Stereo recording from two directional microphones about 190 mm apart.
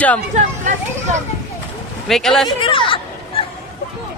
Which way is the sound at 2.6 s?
25° left (ahead or behind).